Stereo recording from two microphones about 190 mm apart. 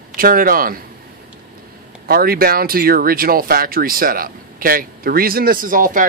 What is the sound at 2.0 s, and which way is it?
Speech, 50° right (ahead or behind).